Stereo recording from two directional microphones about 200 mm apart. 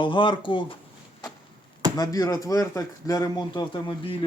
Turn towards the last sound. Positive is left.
turn(degrees=25)  # may be behind; listen again after turning